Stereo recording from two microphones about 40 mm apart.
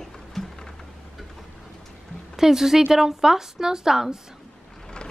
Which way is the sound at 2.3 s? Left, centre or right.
Centre.